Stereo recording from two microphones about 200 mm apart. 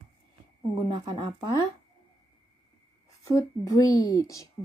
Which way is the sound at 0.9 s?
20° right (ahead or behind).